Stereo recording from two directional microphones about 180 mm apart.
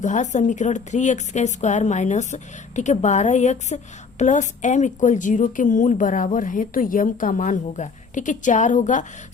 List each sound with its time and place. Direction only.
0.0 s a woman's voice: 40° left (ahead or behind)